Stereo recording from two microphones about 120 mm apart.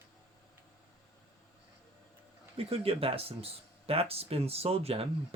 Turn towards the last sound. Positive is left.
turn(degrees=-55)  # may be behind; listen again after turning